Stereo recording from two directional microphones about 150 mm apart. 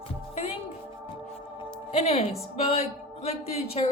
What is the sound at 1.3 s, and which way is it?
Music, 40° left (ahead or behind).